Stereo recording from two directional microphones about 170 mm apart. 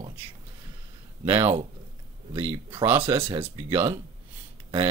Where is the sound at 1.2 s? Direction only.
30° right (ahead or behind).